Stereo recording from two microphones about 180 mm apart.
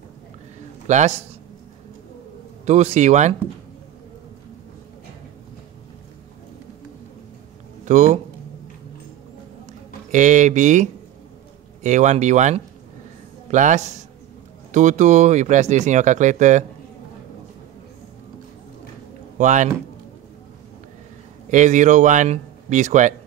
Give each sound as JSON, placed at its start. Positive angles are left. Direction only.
{"t": 0.8, "sound": "a man's voice", "side_deg": -40}
{"t": 2.6, "sound": "speech", "side_deg": -40}
{"t": 7.8, "sound": "speech", "side_deg": -40}
{"t": 10.1, "sound": "speech", "side_deg": -40}
{"t": 19.3, "sound": "speech", "side_deg": -40}
{"t": 21.5, "sound": "speech", "side_deg": -45}